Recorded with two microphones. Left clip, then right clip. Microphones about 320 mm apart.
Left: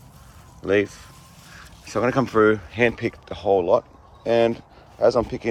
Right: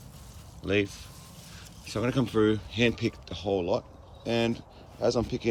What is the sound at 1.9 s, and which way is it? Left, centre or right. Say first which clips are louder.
Speech: left 8 dB; centre.